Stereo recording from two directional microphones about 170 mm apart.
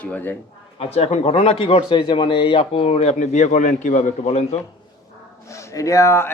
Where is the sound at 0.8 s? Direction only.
35° left (ahead or behind).